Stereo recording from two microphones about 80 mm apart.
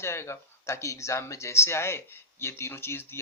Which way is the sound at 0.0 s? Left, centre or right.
Left.